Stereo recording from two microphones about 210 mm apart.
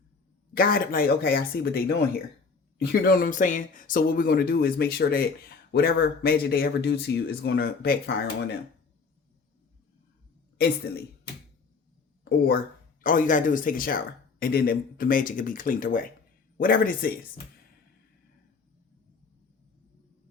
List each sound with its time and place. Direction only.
0.5 s a man's voice: 45° left (ahead or behind)
12.2 s speech: 50° left (ahead or behind)
13.0 s a man's voice: 40° left (ahead or behind)